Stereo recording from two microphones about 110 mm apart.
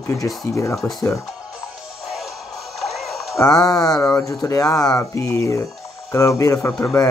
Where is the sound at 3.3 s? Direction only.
30° left (ahead or behind).